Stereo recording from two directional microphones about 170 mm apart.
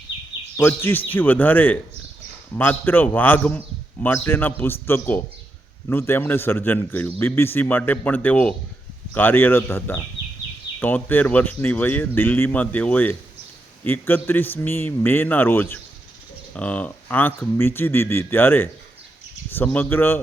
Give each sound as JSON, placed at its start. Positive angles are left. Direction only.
{"t": 0.5, "sound": "a man's voice", "side_deg": 15}